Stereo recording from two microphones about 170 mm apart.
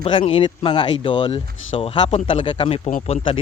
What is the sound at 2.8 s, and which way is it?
Speech, 45° left (ahead or behind).